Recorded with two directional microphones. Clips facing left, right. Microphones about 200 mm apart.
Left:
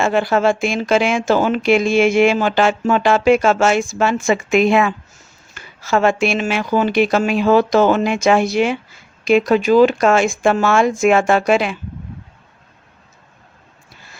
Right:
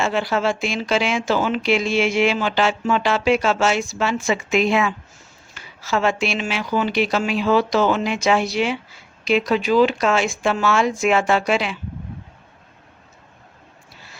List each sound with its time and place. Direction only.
0.0 s speech: 50° left (ahead or behind)